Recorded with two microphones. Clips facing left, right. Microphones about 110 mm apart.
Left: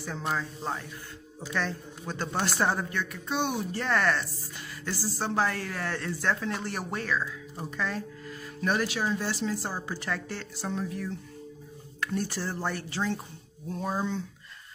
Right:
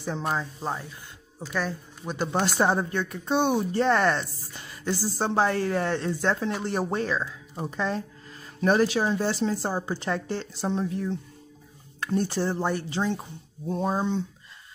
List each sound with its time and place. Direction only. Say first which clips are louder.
0.6 s a woman's voice: right 2 dB; 15° right (ahead or behind)
2.8 s speech: right 4 dB; 30° right (ahead or behind)